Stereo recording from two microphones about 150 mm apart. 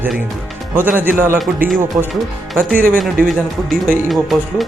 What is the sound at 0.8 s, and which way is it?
Speech, 10° right (ahead or behind).